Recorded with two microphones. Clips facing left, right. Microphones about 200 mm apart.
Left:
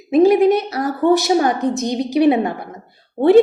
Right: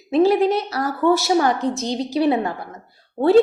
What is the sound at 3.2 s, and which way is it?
Speech, 30° left (ahead or behind).